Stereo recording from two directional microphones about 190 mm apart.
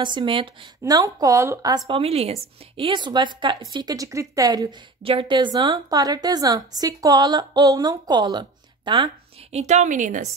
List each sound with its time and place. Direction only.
0.0 s speech: 25° right (ahead or behind)
9.5 s a woman's voice: 35° right (ahead or behind)